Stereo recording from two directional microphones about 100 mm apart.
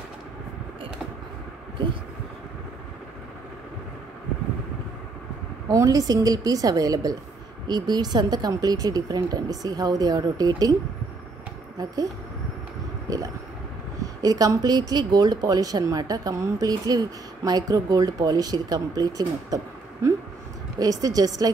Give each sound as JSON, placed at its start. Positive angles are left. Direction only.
{"t": 5.7, "sound": "speech", "side_deg": -35}
{"t": 11.8, "sound": "speech", "side_deg": -40}
{"t": 13.1, "sound": "a sound", "side_deg": -35}
{"t": 14.2, "sound": "speech", "side_deg": -40}